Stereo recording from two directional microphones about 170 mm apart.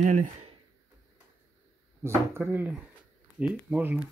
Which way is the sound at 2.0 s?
15° right (ahead or behind).